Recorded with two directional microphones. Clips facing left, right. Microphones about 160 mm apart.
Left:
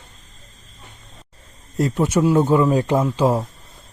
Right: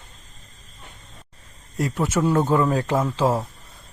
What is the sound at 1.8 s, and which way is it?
A man's voice, 20° left (ahead or behind).